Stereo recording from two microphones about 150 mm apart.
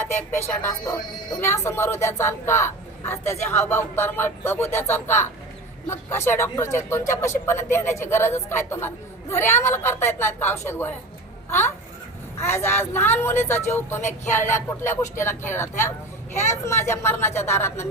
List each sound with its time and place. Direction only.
0.0 s a child's voice: 15° left (ahead or behind)